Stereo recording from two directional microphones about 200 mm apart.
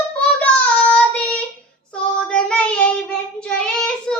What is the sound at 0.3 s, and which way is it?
Child singing, 5° left (ahead or behind).